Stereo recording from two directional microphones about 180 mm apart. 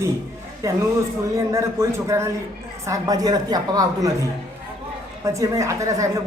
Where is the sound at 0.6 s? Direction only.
15° right (ahead or behind).